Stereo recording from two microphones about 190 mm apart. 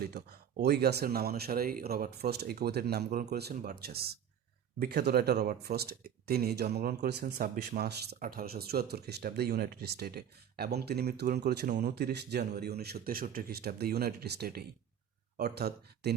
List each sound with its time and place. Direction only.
0.0 s speech: 55° right (ahead or behind)